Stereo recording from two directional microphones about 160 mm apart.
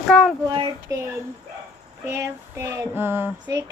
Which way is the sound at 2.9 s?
15° right (ahead or behind).